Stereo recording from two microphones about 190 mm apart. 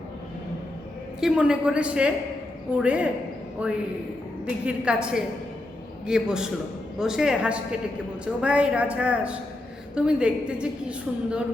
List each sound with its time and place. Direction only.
1.2 s a woman's voice: 5° right (ahead or behind)